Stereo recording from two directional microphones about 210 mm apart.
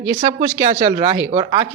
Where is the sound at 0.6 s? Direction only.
30° right (ahead or behind).